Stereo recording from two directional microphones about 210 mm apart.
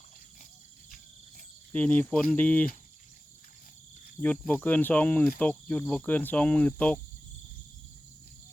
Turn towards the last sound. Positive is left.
turn(degrees=5)  # may be behind; listen again after turning